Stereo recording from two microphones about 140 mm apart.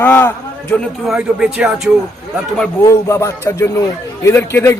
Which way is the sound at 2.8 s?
20° left (ahead or behind).